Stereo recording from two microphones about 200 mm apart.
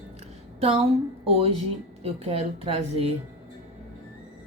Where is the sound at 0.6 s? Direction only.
30° right (ahead or behind).